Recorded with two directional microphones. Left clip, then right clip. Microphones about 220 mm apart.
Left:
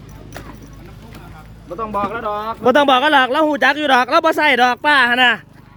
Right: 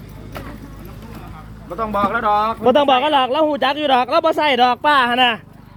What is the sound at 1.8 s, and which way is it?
Speech, 20° right (ahead or behind).